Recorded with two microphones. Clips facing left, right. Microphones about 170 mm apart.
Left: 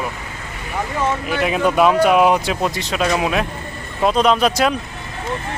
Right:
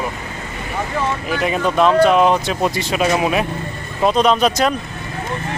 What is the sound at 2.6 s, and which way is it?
Speech, 5° right (ahead or behind).